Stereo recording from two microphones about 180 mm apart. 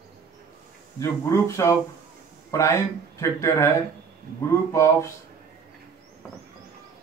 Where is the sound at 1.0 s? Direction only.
15° left (ahead or behind).